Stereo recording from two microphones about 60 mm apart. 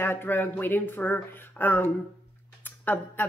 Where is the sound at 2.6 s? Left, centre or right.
Left.